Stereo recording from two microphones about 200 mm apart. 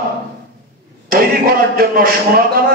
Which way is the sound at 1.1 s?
45° right (ahead or behind).